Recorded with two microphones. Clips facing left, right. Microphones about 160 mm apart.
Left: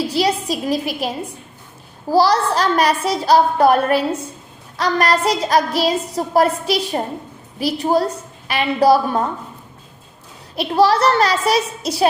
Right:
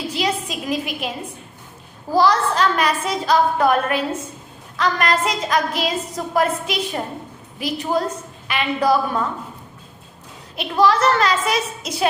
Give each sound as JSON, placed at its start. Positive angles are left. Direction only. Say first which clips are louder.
{"t": 0.1, "sound": "a woman's voice", "louder": "left 5 dB", "side_deg": 35}
{"t": 10.5, "sound": "a woman's voice", "louder": "left 2 dB", "side_deg": 35}